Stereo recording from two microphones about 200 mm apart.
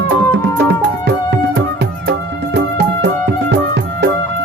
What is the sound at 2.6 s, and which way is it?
Music, 60° right (ahead or behind).